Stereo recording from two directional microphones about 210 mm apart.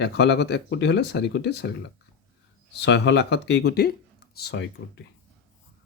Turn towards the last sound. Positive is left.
turn(degrees=55)  # may be behind; listen again after turning